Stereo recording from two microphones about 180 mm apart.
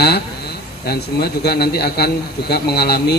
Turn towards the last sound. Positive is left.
turn(degrees=60)  # may be behind; listen again after turning